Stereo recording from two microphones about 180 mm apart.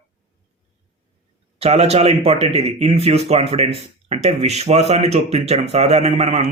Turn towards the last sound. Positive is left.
turn(degrees=-35)  # may be behind; listen again after turning